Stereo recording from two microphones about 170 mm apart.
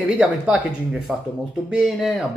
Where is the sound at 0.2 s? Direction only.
5° right (ahead or behind).